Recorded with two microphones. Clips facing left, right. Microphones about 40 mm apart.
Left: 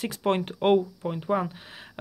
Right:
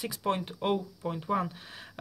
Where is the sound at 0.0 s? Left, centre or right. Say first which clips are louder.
Left 5 dB; left.